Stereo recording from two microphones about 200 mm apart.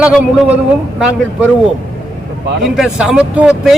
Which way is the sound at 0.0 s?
5° right (ahead or behind).